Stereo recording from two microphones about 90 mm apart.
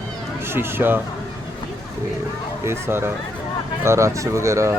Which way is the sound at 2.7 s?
25° right (ahead or behind).